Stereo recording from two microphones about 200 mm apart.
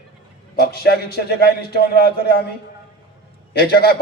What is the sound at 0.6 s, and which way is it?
A man's voice, 55° left (ahead or behind).